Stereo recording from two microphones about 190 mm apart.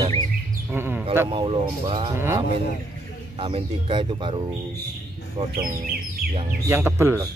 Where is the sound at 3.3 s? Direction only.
30° right (ahead or behind).